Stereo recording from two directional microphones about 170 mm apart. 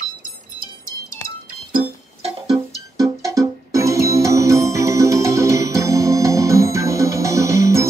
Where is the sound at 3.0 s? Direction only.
20° right (ahead or behind).